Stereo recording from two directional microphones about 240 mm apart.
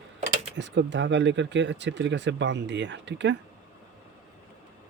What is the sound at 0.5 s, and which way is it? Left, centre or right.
Speech, right.